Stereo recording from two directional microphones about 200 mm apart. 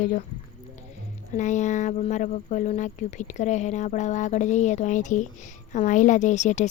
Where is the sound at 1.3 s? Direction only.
35° left (ahead or behind).